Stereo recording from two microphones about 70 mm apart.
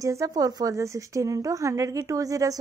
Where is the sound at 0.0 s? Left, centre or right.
Right.